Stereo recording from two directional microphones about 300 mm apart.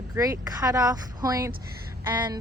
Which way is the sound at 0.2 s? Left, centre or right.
Centre.